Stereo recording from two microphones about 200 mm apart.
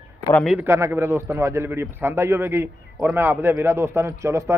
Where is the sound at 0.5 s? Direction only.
10° right (ahead or behind).